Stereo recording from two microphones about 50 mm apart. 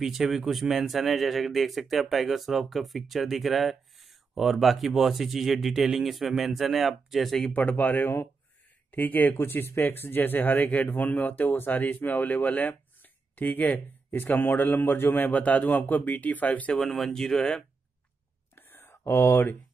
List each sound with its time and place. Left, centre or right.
0.0 s speech: centre
7.5 s a man's voice: left
16.9 s speech: centre
18.5 s whispering: left
19.0 s speech: left